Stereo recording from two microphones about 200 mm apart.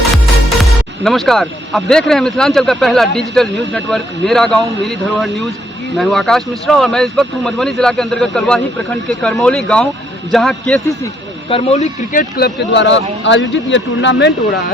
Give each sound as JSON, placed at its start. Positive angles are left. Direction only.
{"t": 0.6, "sound": "speech", "side_deg": 0}
{"t": 11.4, "sound": "speech", "side_deg": 30}
{"t": 12.4, "sound": "speech", "side_deg": 60}